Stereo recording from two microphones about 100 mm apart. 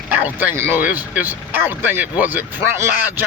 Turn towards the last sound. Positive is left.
turn(degrees=-20)  # may be behind; listen again after turning